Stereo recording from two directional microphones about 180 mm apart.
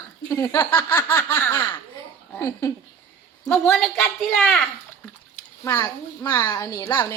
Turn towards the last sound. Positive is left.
turn(degrees=15)  # may be behind; listen again after turning